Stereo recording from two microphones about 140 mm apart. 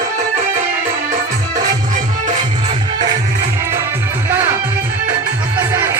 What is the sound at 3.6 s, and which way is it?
Music, 20° right (ahead or behind).